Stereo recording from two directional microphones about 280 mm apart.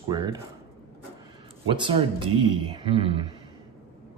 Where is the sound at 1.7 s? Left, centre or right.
Centre.